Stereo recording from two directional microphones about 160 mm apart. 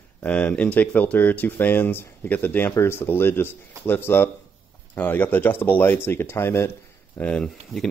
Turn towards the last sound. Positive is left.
turn(degrees=5)  # may be behind; listen again after turning